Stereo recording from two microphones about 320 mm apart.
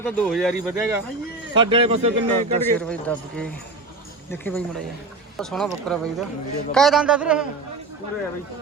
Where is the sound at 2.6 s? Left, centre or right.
Centre.